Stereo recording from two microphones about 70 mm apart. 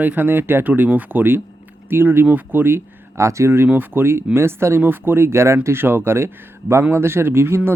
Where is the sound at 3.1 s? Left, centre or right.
Right.